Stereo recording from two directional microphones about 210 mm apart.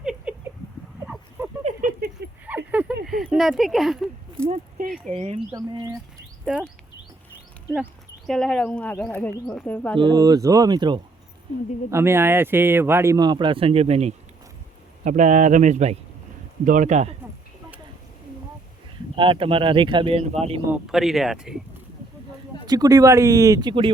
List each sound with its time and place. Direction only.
0.0 s a sound: 5° right (ahead or behind)
1.6 s a sound: 45° right (ahead or behind)
2.5 s a sound: 5° right (ahead or behind)
4.4 s a sound: 30° right (ahead or behind)
5.0 s a man's voice: 30° right (ahead or behind)
5.5 s speech: 20° right (ahead or behind)
6.4 s speech: 5° right (ahead or behind)
8.3 s speech: 5° left (ahead or behind)
10.0 s a man's voice: 20° right (ahead or behind)
19.1 s speech: 25° right (ahead or behind)
20.7 s speech: 5° right (ahead or behind)
22.6 s speech: 20° right (ahead or behind)